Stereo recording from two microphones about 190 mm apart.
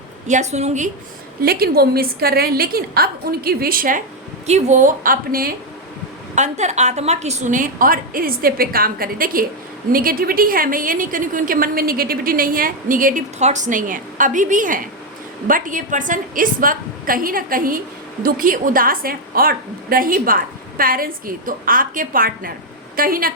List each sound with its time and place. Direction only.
0.3 s a woman's voice: 35° right (ahead or behind)
1.4 s a woman's voice: 55° right (ahead or behind)
6.3 s a woman's voice: 35° right (ahead or behind)